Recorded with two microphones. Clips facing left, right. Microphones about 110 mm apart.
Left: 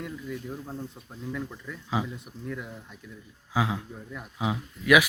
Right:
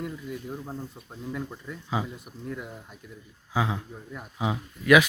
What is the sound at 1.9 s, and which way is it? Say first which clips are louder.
Speech: left 1 dB; centre (ahead or behind).